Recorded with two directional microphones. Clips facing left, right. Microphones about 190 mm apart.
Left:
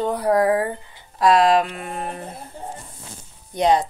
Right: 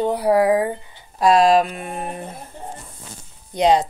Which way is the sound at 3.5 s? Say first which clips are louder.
Right 2 dB; 20° right (ahead or behind).